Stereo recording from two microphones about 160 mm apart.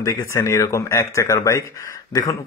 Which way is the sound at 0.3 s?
20° left (ahead or behind).